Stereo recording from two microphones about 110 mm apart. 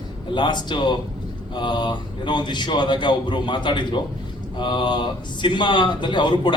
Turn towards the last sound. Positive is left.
turn(degrees=45)  # may be behind; listen again after turning